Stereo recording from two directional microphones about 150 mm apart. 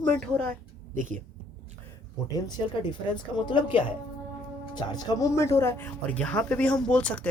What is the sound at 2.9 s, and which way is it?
A woman's voice, 30° left (ahead or behind).